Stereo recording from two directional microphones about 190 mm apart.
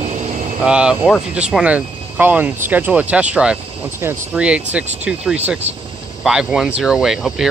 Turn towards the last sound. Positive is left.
turn(degrees=0)  # may be behind; listen again after turning